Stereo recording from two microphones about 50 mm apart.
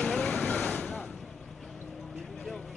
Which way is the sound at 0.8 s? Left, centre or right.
Left.